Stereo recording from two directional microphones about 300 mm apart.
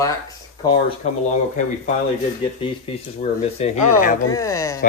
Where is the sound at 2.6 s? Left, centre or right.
Centre.